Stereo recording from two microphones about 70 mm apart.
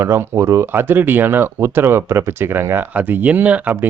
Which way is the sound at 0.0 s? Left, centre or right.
Right.